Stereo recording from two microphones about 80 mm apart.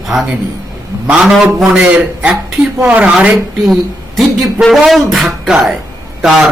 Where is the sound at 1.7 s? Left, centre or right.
Centre.